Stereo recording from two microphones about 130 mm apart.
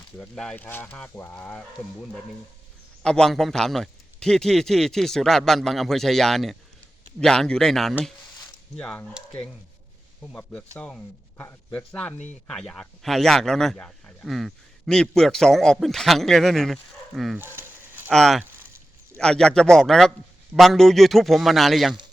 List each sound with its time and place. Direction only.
0.2 s speech: 5° left (ahead or behind)
3.0 s a man's voice: 5° left (ahead or behind)
10.2 s a man's voice: 10° left (ahead or behind)
17.3 s a sound: 15° right (ahead or behind)
18.1 s a man's voice: 5° left (ahead or behind)